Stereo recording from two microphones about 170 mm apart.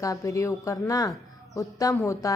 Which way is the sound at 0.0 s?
20° left (ahead or behind).